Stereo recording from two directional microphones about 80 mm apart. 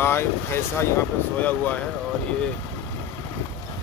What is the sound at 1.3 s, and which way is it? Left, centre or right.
Speech, left.